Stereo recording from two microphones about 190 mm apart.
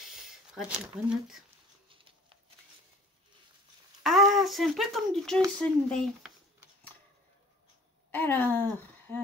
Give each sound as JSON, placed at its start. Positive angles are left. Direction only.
{"t": 0.0, "sound": "a sound", "side_deg": -5}
{"t": 4.0, "sound": "speech", "side_deg": 0}
{"t": 8.1, "sound": "a woman's voice", "side_deg": 10}